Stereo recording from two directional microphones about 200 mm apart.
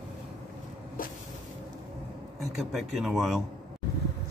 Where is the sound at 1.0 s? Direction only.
45° left (ahead or behind).